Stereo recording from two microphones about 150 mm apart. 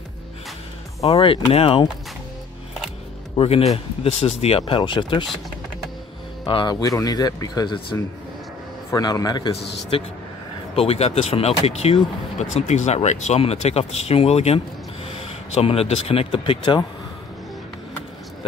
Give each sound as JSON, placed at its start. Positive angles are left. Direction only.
{"t": 1.0, "sound": "speech", "side_deg": 40}
{"t": 3.3, "sound": "speech", "side_deg": 40}
{"t": 6.4, "sound": "speech", "side_deg": 30}
{"t": 8.9, "sound": "speech", "side_deg": 25}
{"t": 9.9, "sound": "speech", "side_deg": 35}